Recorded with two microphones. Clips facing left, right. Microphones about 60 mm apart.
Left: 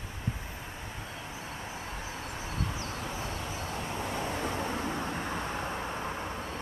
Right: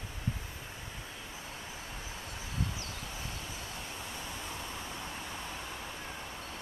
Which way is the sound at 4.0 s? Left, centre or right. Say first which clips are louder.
Left 9 dB; left.